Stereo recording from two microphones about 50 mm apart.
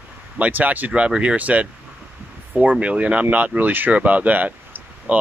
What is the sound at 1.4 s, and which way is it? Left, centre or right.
Speech, right.